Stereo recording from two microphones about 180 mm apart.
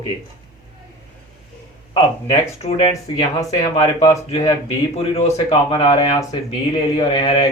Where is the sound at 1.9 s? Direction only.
30° left (ahead or behind).